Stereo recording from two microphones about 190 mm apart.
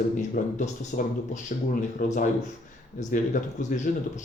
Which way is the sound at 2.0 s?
45° left (ahead or behind).